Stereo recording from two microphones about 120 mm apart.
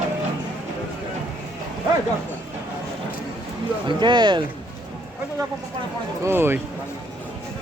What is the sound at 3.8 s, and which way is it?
Speech, 40° right (ahead or behind).